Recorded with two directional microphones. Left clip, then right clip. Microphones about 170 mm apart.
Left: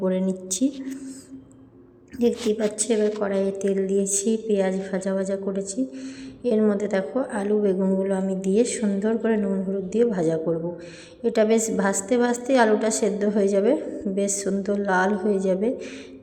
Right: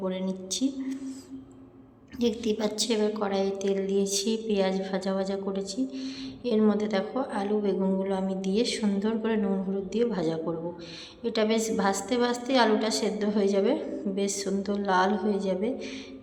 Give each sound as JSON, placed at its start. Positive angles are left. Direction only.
{"t": 0.0, "sound": "a woman's voice", "side_deg": 25}
{"t": 2.2, "sound": "a woman's voice", "side_deg": 15}